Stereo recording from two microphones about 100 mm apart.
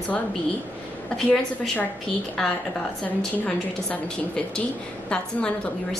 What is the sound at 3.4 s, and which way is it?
A woman's voice, 10° left (ahead or behind).